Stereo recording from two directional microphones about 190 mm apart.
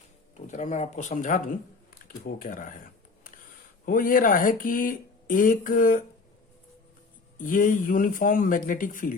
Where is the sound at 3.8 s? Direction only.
45° left (ahead or behind).